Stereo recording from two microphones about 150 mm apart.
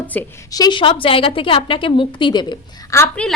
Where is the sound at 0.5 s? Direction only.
30° left (ahead or behind).